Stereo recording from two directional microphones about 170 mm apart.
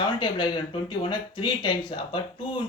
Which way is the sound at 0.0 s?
25° left (ahead or behind).